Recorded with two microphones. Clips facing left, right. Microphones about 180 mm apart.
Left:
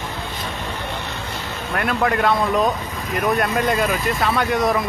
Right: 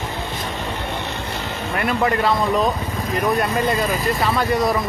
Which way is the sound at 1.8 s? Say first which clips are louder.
Even; centre (ahead or behind).